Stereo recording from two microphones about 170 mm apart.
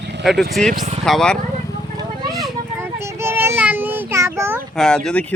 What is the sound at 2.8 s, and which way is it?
Child singing, 15° right (ahead or behind).